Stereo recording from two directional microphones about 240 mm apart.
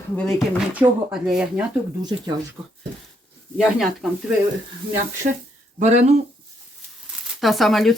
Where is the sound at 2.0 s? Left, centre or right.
Centre.